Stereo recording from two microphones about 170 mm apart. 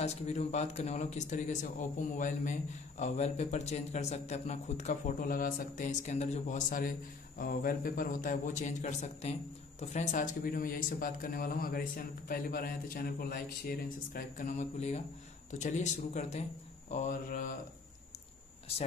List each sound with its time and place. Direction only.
0.0 s speech: 40° left (ahead or behind)